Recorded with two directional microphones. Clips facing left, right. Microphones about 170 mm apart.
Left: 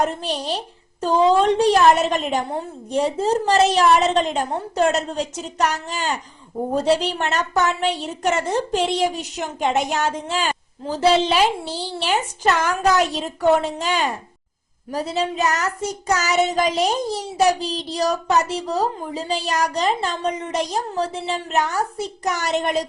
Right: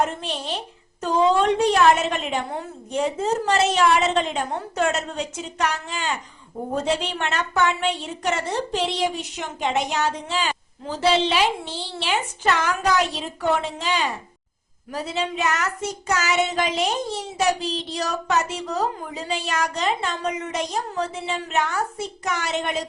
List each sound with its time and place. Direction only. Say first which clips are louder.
0.0 s speech: left 2 dB; 40° left (ahead or behind)